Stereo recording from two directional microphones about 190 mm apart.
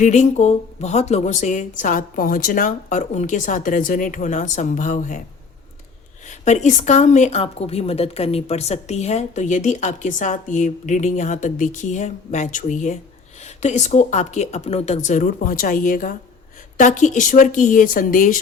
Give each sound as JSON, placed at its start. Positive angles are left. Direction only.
{"t": 0.0, "sound": "speech", "side_deg": 40}
{"t": 6.2, "sound": "a woman's voice", "side_deg": 40}